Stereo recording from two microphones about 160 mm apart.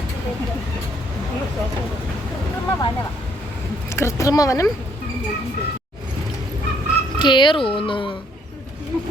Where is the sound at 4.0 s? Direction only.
20° left (ahead or behind).